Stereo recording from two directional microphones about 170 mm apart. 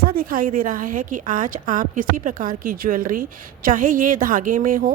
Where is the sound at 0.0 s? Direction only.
60° right (ahead or behind).